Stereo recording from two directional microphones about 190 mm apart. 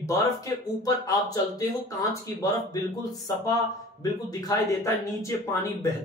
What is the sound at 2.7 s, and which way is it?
Speech, 20° left (ahead or behind).